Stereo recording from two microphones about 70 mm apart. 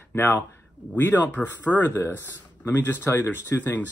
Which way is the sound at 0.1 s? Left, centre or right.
Left.